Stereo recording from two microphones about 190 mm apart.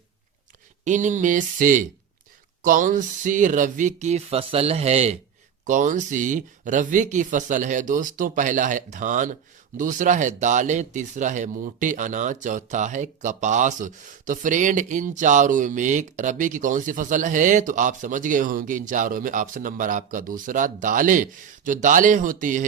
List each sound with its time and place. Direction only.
0.9 s speech: 40° right (ahead or behind)